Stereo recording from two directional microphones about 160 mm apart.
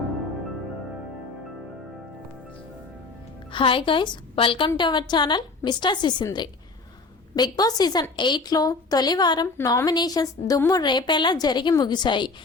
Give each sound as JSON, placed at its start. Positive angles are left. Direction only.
{"t": 3.5, "sound": "a woman's voice", "side_deg": 30}